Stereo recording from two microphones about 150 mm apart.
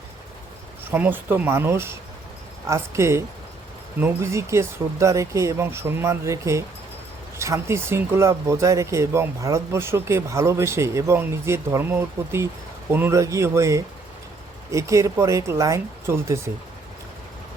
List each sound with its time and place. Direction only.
0.9 s speech: 10° right (ahead or behind)